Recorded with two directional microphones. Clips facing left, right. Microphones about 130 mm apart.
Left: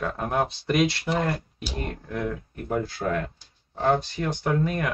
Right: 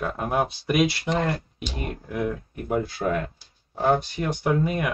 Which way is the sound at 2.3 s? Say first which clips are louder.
Right 2 dB; 20° right (ahead or behind).